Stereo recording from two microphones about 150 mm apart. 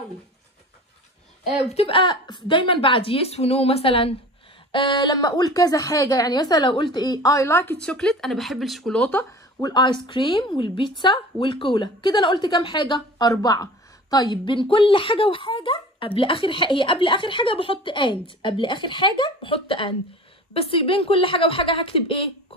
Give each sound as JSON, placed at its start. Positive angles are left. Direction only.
{"t": 1.7, "sound": "a woman's voice", "side_deg": 40}
{"t": 9.6, "sound": "speech", "side_deg": 25}